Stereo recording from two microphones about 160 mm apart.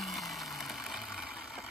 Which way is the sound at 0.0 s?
Centre (ahead or behind).